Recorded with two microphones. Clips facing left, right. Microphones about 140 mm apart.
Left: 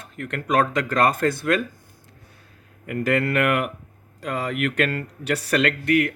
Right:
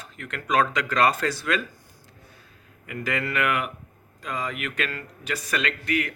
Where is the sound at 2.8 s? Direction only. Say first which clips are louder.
Left 7 dB; 55° left (ahead or behind).